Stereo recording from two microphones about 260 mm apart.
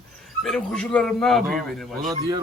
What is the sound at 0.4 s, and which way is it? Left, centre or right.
A man's voice, centre.